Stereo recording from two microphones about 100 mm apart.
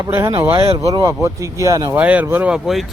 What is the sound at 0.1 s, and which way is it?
Speech, 25° right (ahead or behind).